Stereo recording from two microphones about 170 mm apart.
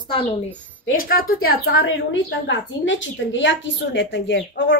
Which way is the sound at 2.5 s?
90° left.